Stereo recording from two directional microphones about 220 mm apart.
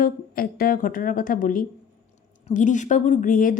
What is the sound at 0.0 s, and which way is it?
A woman's voice, 40° left (ahead or behind).